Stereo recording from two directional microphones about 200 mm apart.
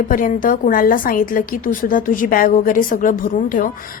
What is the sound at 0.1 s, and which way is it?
A woman's voice, 45° left (ahead or behind).